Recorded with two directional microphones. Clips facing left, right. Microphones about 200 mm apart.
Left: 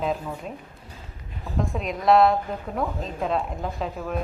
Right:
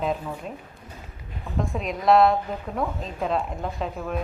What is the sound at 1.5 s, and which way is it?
A woman's voice, centre (ahead or behind).